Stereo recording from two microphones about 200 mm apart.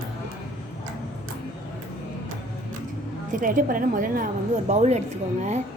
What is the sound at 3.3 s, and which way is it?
Speech, 40° right (ahead or behind).